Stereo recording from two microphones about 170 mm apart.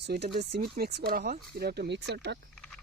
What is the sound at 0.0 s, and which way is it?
Speech, 75° right (ahead or behind).